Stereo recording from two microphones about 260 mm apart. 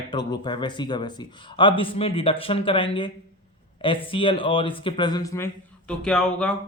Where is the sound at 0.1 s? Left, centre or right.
Centre.